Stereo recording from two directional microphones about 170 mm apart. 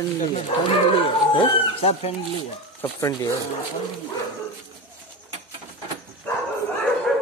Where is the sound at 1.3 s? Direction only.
35° left (ahead or behind).